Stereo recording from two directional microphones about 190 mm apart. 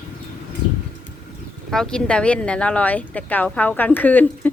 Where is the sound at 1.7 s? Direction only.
5° left (ahead or behind).